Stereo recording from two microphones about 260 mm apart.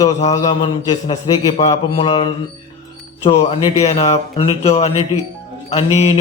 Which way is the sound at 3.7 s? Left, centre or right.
Left.